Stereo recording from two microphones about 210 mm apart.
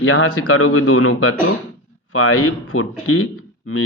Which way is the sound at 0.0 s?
85° left.